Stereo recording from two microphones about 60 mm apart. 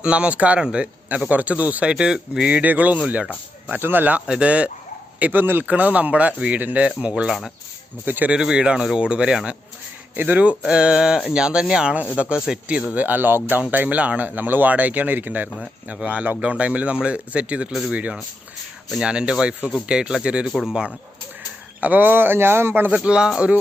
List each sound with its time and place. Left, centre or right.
0.0 s speech: centre
1.9 s a man's voice: centre
2.5 s speech: right
3.8 s a man's voice: right
4.3 s speech: centre
5.2 s a man's voice: right
7.3 s speech: centre
8.0 s a man's voice: right
8.3 s a man's voice: centre
17.7 s speech: centre
17.9 s a man's voice: right
21.8 s a man's voice: right
23.0 s a man's voice: centre